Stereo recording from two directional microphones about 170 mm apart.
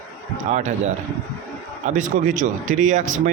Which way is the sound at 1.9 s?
50° right (ahead or behind).